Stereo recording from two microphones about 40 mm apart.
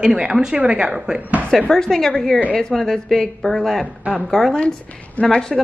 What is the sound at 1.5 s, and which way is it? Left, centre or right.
Speech, centre.